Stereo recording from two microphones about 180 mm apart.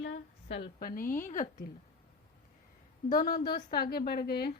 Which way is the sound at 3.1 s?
55° left (ahead or behind).